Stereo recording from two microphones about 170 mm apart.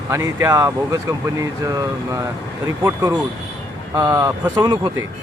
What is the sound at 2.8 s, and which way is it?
Speech, 15° right (ahead or behind).